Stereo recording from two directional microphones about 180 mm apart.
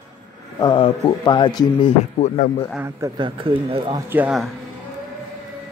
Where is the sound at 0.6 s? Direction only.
25° left (ahead or behind).